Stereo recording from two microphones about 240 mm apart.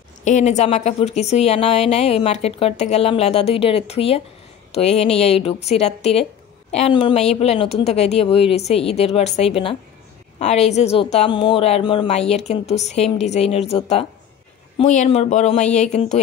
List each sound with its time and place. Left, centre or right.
0.2 s a woman's voice: left